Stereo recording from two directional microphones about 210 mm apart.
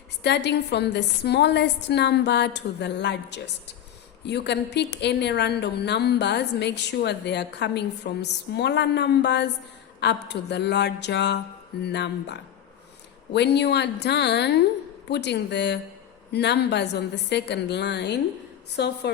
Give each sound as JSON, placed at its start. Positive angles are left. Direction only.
{"t": 0.2, "sound": "a woman's voice", "side_deg": 55}